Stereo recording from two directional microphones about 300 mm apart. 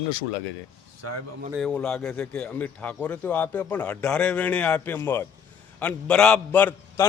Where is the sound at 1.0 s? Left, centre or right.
Right.